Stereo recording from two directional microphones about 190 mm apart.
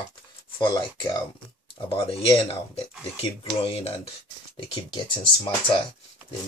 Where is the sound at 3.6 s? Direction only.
30° left (ahead or behind).